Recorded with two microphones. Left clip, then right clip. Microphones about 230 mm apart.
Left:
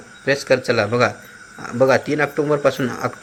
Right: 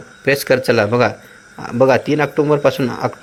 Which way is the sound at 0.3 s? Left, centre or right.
Right.